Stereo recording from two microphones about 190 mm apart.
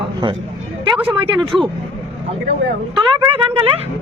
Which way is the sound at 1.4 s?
Centre (ahead or behind).